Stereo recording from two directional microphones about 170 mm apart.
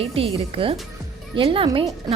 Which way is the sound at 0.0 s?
35° right (ahead or behind).